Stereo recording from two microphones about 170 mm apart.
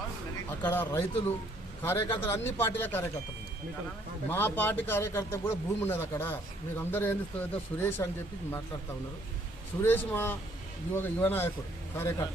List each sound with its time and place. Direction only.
0.6 s a man's voice: 10° left (ahead or behind)
4.3 s a man's voice: 10° left (ahead or behind)
9.8 s a man's voice: 10° left (ahead or behind)